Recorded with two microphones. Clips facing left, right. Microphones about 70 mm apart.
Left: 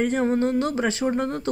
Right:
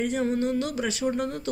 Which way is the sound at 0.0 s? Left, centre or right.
Left.